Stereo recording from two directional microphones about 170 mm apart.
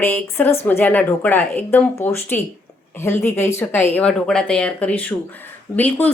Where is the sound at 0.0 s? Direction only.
10° left (ahead or behind).